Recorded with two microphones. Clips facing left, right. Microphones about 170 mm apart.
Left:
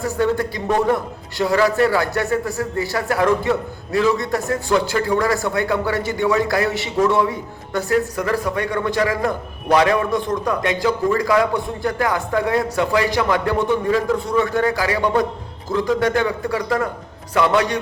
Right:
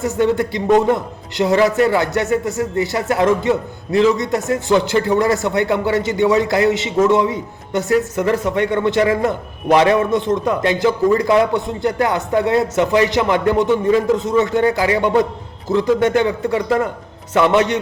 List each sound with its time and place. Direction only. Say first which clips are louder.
0.0 s a man's voice: right 3 dB; 20° right (ahead or behind)